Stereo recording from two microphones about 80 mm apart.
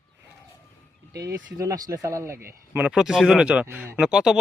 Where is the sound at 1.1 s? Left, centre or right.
Right.